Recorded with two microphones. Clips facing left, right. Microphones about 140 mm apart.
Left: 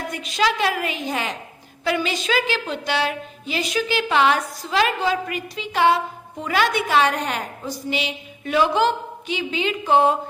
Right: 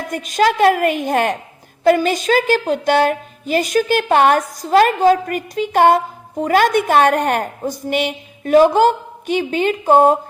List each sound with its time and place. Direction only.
0.1 s a woman's voice: 45° right (ahead or behind)